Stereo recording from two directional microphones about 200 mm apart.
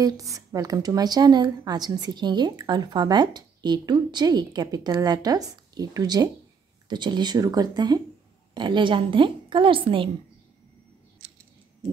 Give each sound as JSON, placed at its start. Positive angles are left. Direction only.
{"t": 0.0, "sound": "a woman's voice", "side_deg": -15}